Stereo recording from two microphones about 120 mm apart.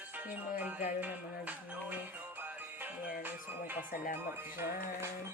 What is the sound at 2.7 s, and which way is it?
Music, 15° right (ahead or behind).